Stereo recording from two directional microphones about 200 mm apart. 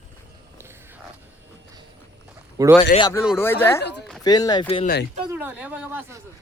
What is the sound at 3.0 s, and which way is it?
Speech, 20° left (ahead or behind).